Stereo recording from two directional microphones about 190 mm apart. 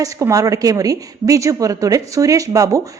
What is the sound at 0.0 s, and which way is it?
A woman's voice, 15° right (ahead or behind).